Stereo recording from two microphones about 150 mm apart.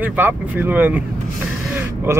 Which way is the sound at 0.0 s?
10° right (ahead or behind).